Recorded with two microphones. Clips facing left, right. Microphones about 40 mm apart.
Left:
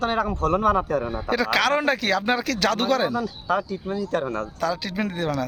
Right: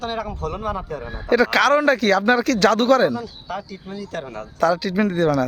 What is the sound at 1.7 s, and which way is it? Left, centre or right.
Speech, centre.